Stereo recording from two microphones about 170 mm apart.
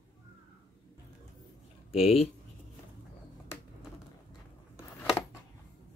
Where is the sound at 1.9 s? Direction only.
35° left (ahead or behind).